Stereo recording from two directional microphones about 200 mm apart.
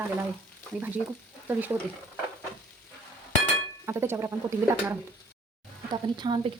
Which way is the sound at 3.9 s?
10° right (ahead or behind).